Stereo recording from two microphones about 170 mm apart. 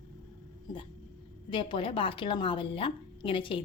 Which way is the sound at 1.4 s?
30° left (ahead or behind).